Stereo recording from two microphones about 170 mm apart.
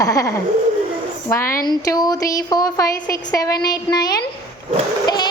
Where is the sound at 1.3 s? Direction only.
15° left (ahead or behind).